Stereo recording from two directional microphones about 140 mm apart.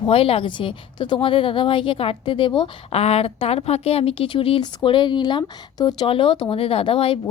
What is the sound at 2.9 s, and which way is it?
Speech, 45° left (ahead or behind).